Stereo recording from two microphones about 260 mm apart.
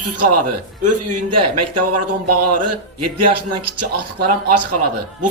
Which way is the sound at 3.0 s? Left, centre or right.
Right.